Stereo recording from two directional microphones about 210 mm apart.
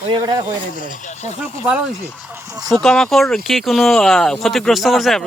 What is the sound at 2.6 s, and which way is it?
Speech, centre (ahead or behind).